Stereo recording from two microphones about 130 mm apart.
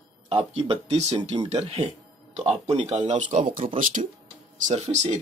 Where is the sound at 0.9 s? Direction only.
55° right (ahead or behind).